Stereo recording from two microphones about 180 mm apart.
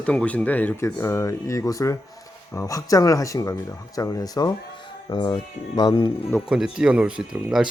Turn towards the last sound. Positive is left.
turn(degrees=-5)  # may be behind; listen again after turning